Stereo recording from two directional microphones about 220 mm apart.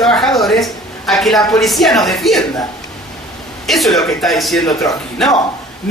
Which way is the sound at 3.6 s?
Centre (ahead or behind).